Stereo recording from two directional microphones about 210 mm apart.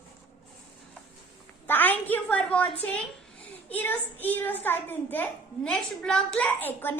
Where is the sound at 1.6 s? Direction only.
10° left (ahead or behind).